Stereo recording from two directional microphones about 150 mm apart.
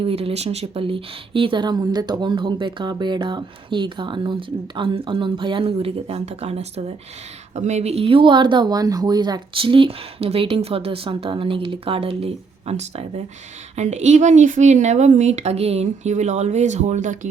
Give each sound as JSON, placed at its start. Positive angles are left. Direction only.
{"t": 0.0, "sound": "a woman's voice", "side_deg": -40}